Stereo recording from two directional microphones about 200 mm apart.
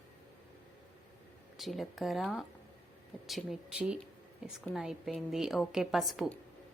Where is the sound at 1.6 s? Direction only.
Centre (ahead or behind).